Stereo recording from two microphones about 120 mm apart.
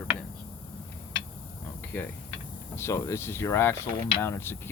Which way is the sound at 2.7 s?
20° left (ahead or behind).